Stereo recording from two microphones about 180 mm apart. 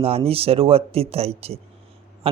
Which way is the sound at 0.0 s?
30° right (ahead or behind).